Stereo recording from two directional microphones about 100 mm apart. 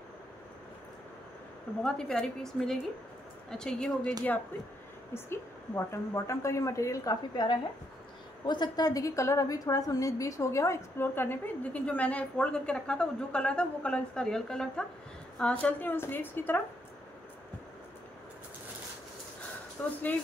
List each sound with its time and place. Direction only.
1.8 s a woman's voice: 5° left (ahead or behind)
5.1 s a woman's voice: 25° left (ahead or behind)
7.4 s a woman's voice: 45° left (ahead or behind); by 16.6 s 20° left (ahead or behind)
19.8 s speech: 15° left (ahead or behind)